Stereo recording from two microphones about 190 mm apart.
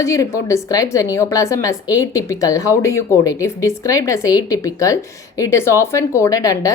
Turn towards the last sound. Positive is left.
turn(degrees=15)  # may be behind; listen again after turning